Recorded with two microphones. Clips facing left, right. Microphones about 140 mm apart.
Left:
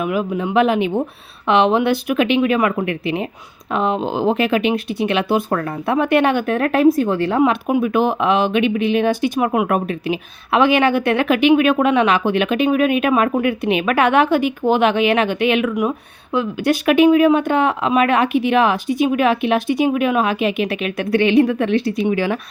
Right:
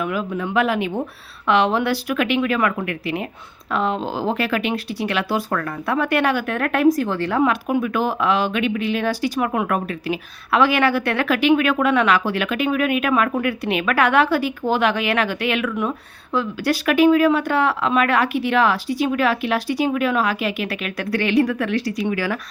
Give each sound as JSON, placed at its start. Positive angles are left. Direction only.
{"t": 0.0, "sound": "a woman's voice", "side_deg": 20}